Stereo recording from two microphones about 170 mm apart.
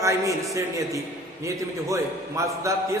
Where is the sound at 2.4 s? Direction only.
20° right (ahead or behind).